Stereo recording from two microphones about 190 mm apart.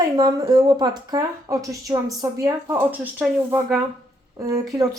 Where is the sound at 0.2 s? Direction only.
20° right (ahead or behind).